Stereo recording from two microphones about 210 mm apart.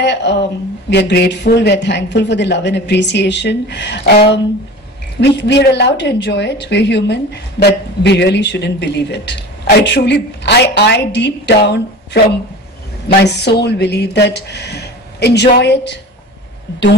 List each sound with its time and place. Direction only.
0.0 s speech: 55° left (ahead or behind)
13.2 s speech: 55° left (ahead or behind)